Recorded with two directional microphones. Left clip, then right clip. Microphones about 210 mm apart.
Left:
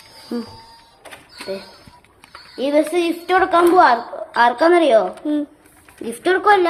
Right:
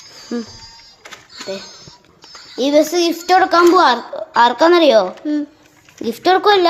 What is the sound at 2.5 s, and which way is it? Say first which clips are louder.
A woman's voice: right 3 dB; 45° right (ahead or behind).